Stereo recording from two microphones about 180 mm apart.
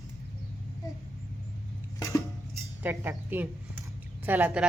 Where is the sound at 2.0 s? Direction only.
15° left (ahead or behind).